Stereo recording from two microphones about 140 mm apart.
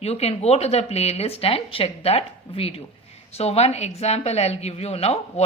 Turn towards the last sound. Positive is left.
turn(degrees=50)  # may be behind; listen again after turning